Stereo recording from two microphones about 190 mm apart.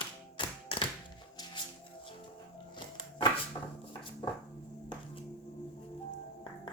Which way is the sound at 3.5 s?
20° left (ahead or behind).